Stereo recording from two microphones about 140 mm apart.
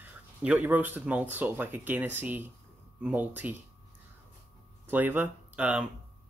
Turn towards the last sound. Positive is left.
turn(degrees=-10)  # may be behind; listen again after turning